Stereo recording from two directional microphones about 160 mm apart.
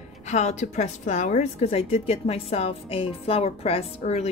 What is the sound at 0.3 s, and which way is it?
A woman's voice, 50° left (ahead or behind).